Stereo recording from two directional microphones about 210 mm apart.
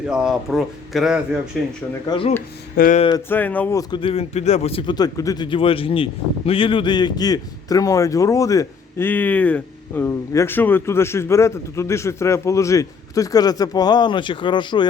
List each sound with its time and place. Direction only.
0.1 s speech: 5° right (ahead or behind)
2.0 s speech: 25° left (ahead or behind)
2.7 s speech: 40° left (ahead or behind)
3.2 s speech: 10° left (ahead or behind)